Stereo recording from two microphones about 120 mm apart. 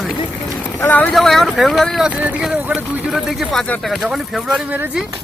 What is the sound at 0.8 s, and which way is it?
Speech, 15° left (ahead or behind).